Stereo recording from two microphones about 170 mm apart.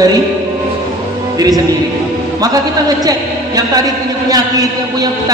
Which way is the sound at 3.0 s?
20° right (ahead or behind).